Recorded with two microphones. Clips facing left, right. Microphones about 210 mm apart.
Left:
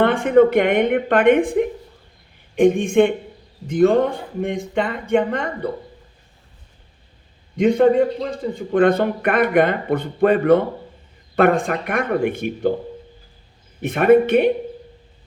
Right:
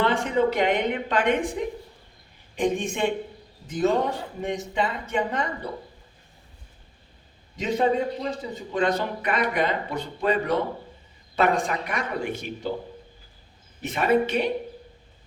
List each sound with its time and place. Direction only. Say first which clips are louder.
0.0 s speech: left 9 dB; 55° left (ahead or behind)
7.5 s speech: left 9 dB; 55° left (ahead or behind)
13.8 s speech: left 9 dB; 55° left (ahead or behind)